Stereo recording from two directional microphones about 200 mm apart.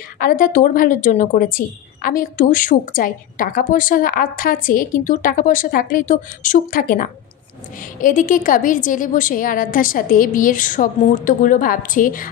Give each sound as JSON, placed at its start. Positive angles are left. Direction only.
{"t": 0.2, "sound": "a woman's voice", "side_deg": 45}